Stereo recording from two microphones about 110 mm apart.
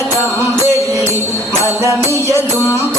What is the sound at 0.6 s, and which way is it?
Music, 25° right (ahead or behind).